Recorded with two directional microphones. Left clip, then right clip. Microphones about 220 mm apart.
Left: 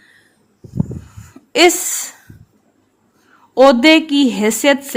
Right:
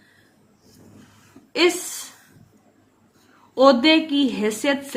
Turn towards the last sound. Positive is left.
turn(degrees=45)  # may be behind; listen again after turning